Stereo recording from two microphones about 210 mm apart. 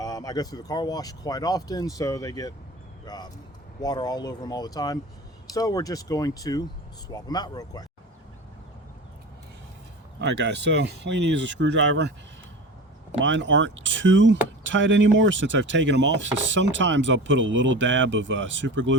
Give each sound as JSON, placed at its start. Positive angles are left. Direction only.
{"t": 0.0, "sound": "speech", "side_deg": 20}
{"t": 10.2, "sound": "rub", "side_deg": -55}
{"t": 13.1, "sound": "rub", "side_deg": -60}